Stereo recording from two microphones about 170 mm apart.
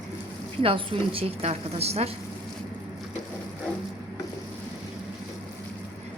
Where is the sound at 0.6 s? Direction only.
35° right (ahead or behind).